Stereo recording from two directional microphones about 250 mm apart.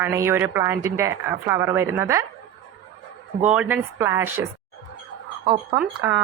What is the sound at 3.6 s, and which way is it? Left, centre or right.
Speech, centre.